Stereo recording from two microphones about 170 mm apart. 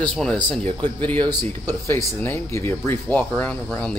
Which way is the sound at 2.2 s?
15° left (ahead or behind).